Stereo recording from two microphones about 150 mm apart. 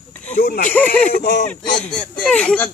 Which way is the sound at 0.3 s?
65° left (ahead or behind).